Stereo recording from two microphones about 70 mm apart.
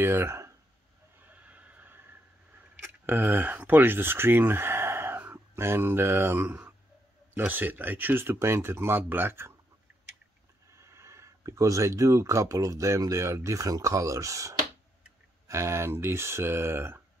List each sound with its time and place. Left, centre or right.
0.0 s speech: right
1.2 s neigh: right
2.9 s speech: right
10.8 s speech: right